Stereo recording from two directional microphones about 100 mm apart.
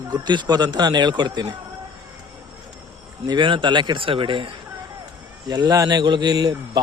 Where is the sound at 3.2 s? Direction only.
50° right (ahead or behind).